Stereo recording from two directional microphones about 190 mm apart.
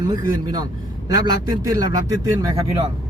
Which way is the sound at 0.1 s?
20° right (ahead or behind).